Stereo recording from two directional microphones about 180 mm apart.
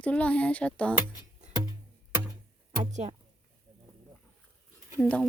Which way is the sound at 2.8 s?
40° right (ahead or behind).